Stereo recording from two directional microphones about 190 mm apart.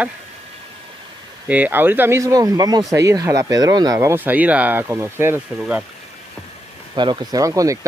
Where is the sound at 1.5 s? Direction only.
10° right (ahead or behind).